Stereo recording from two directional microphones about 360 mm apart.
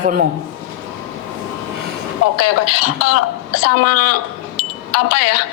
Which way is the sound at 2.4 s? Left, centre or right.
Left.